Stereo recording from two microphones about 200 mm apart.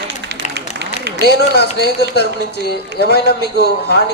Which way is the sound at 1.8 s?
55° left (ahead or behind).